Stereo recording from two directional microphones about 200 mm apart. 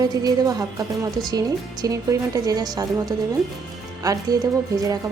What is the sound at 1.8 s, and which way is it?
A woman's voice, 20° right (ahead or behind).